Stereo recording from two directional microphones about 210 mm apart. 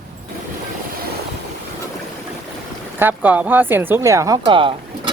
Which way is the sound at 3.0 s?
10° right (ahead or behind).